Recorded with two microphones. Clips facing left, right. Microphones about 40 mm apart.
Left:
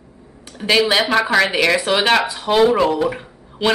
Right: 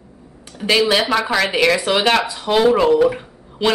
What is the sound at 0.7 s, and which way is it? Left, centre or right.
Speech, centre.